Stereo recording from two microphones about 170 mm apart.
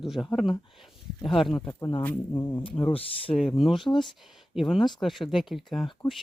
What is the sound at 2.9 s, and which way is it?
Speech, 35° left (ahead or behind).